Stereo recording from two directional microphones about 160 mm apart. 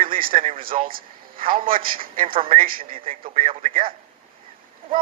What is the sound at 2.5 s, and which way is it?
Speech, 60° right (ahead or behind).